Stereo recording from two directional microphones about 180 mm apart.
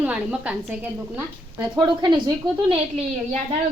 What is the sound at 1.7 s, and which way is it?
Speech, 25° right (ahead or behind).